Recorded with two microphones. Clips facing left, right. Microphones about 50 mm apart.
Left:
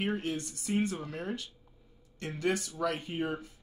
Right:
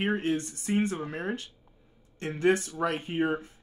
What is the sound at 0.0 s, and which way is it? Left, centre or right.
A man's voice, right.